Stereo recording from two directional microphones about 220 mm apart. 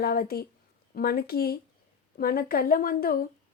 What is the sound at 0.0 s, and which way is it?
A woman's voice, 45° left (ahead or behind).